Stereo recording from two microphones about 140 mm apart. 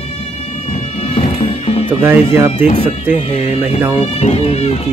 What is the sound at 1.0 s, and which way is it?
Music, 40° left (ahead or behind).